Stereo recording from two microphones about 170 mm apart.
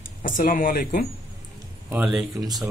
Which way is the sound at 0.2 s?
50° left (ahead or behind).